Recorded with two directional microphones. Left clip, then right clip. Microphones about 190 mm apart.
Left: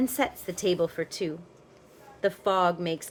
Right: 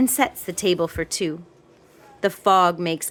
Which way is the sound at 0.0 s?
35° right (ahead or behind).